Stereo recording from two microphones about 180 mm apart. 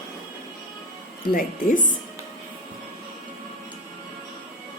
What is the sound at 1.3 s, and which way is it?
Speech, 50° left (ahead or behind).